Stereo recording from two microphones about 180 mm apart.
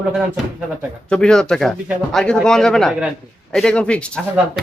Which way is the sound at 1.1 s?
5° left (ahead or behind).